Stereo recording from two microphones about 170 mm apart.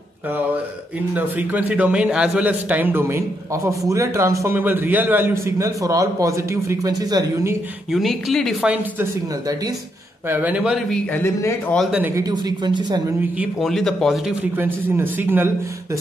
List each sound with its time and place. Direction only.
1.1 s a man's voice: 10° right (ahead or behind)
7.9 s speech: centre (ahead or behind)
10.3 s a man's voice: 10° right (ahead or behind)
11.1 s speech: 15° left (ahead or behind)
11.7 s speech: centre (ahead or behind)
12.0 s speech: 20° right (ahead or behind)
13.4 s speech: centre (ahead or behind)
14.6 s a man's voice: 15° right (ahead or behind)